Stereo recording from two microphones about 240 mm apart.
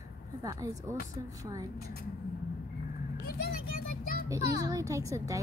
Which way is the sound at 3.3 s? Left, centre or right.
Left.